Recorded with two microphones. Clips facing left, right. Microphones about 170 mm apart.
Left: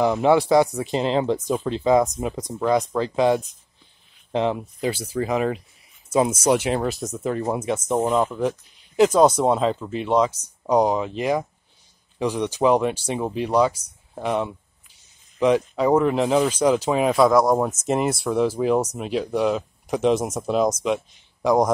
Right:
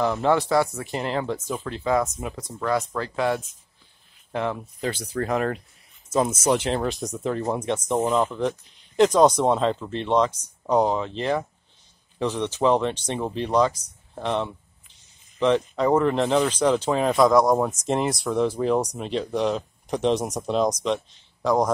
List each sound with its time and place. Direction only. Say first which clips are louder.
0.0 s speech: left 4 dB; 15° left (ahead or behind)